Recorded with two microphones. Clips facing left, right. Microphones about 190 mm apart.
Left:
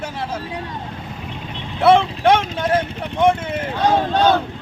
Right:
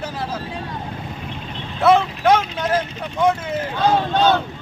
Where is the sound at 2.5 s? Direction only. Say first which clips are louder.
Left 2 dB; 50° left (ahead or behind).